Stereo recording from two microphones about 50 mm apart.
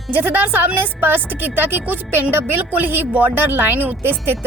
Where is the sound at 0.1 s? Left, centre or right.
Right.